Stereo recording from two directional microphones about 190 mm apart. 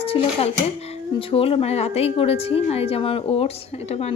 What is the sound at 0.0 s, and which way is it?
A woman's voice, 30° left (ahead or behind).